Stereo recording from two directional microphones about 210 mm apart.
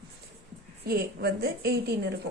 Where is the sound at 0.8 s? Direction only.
45° right (ahead or behind).